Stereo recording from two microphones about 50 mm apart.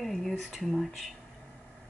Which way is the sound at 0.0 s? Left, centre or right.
Centre.